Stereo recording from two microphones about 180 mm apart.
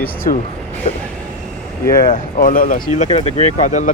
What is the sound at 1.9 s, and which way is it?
Speech, 50° left (ahead or behind).